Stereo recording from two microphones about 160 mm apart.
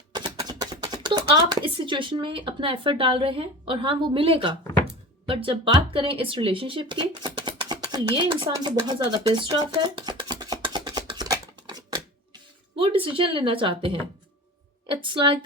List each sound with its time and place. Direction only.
0.1 s speech: 25° right (ahead or behind)
9.3 s a sound: 25° right (ahead or behind)
14.8 s speech: 30° right (ahead or behind)